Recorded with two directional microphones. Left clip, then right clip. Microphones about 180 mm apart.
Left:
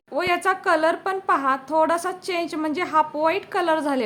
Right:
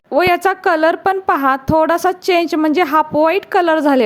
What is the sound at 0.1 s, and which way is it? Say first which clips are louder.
A woman's voice: right 8 dB; 45° right (ahead or behind).